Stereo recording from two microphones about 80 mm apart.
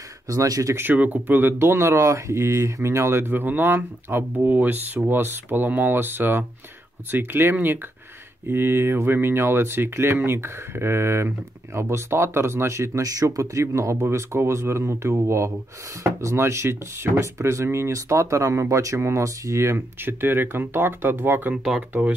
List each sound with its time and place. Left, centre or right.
0.3 s speech: right
0.7 s speech: right